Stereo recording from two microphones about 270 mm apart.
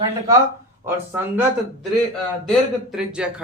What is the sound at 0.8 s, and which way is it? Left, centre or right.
Speech, centre.